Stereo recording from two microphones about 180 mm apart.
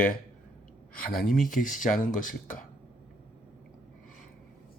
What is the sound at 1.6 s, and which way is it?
Speech, 45° left (ahead or behind).